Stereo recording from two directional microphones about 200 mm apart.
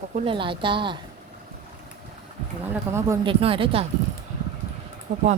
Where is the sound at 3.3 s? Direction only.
25° right (ahead or behind).